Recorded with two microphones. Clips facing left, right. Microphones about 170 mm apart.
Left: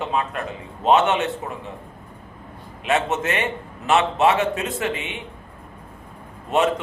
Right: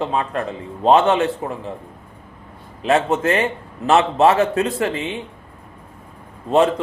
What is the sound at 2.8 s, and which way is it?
Speech, 35° right (ahead or behind).